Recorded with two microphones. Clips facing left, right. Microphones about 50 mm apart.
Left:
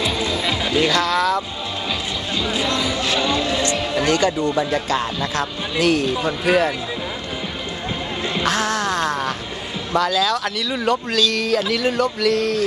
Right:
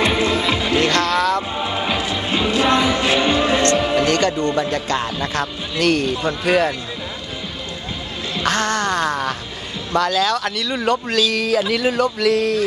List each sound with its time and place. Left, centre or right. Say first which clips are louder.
0.1 s music: right 4 dB; right
0.6 s music: right 1 dB; centre
1.6 s music: right 5 dB; right
4.1 s speech: even; centre
8.4 s speech: right 2 dB; centre